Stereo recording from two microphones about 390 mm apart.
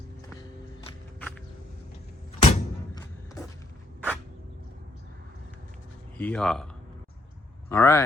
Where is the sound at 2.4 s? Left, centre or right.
Centre.